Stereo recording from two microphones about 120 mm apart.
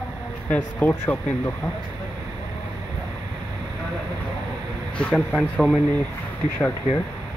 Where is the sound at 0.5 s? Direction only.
15° left (ahead or behind).